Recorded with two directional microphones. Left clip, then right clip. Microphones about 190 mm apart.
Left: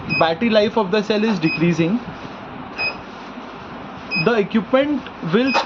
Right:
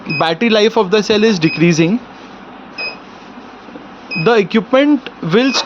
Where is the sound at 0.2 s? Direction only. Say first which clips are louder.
Right 4 dB; 70° right (ahead or behind).